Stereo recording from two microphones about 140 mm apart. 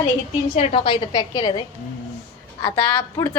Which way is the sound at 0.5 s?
40° left (ahead or behind).